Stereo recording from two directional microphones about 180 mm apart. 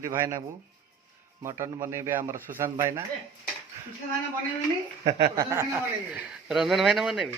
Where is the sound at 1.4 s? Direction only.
15° right (ahead or behind).